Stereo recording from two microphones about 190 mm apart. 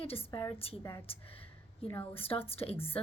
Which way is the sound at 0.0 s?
30° left (ahead or behind).